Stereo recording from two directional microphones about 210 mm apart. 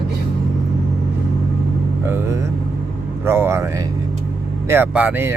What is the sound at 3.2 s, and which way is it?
Speech, 10° right (ahead or behind).